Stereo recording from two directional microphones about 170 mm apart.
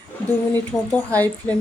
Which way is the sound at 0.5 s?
10° left (ahead or behind).